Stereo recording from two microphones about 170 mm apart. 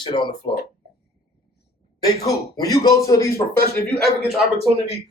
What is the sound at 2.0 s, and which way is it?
A man's voice, 20° left (ahead or behind).